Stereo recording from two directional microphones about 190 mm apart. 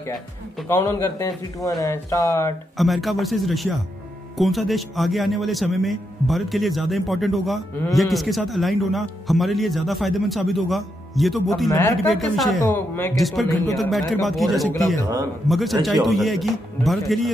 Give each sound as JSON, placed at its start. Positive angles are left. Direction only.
{"t": 0.7, "sound": "a man's voice", "side_deg": 15}
{"t": 2.8, "sound": "speech", "side_deg": 0}
{"t": 11.7, "sound": "a man's voice", "side_deg": 10}